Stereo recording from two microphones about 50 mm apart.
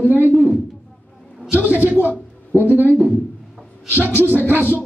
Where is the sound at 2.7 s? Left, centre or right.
Right.